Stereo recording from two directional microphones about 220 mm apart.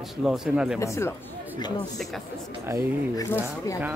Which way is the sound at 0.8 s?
10° left (ahead or behind).